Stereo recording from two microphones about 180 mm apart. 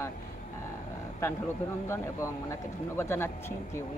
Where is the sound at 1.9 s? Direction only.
15° left (ahead or behind).